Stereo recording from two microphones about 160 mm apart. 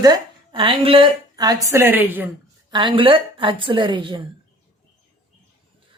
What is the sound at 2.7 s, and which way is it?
Speech, 30° right (ahead or behind).